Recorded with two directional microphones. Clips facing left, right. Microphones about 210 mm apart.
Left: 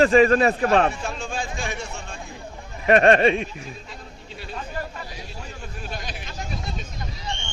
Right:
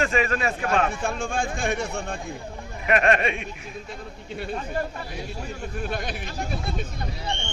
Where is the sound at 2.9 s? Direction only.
30° left (ahead or behind).